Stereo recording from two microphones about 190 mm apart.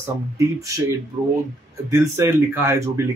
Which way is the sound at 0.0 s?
15° right (ahead or behind).